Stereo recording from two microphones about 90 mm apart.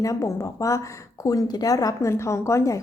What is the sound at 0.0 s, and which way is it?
A woman's voice, 35° left (ahead or behind).